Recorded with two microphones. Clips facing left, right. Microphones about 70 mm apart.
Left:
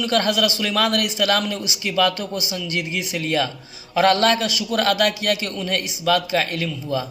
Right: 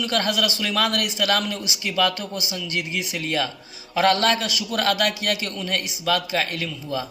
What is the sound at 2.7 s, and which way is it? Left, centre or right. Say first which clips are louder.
A man's voice: left 1 dB; left.